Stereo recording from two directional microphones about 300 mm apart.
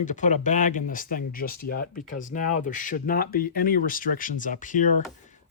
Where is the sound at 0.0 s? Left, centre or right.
Left.